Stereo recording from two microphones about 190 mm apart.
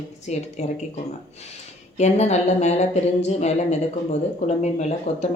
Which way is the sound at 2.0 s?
35° left (ahead or behind).